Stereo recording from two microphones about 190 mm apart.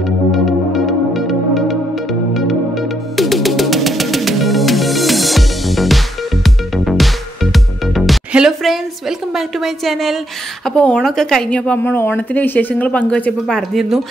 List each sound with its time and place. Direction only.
0.3 s music: centre (ahead or behind)
3.2 s music: centre (ahead or behind)
10.7 s speech: 5° left (ahead or behind)